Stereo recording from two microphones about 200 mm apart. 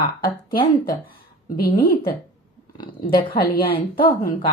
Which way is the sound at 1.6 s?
45° left (ahead or behind).